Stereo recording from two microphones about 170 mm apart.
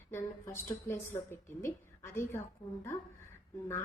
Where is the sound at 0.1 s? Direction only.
15° left (ahead or behind).